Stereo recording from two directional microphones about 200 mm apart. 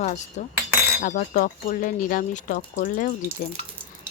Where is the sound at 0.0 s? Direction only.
35° left (ahead or behind).